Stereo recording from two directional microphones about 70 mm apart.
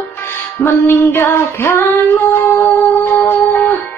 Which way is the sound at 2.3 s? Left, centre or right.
Left.